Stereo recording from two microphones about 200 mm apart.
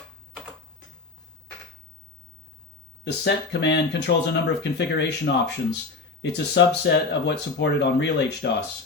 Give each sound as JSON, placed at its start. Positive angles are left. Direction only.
{"t": 3.0, "sound": "speech", "side_deg": 55}